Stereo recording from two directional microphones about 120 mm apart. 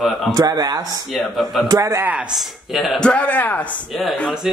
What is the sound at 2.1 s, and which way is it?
Speech, 5° right (ahead or behind).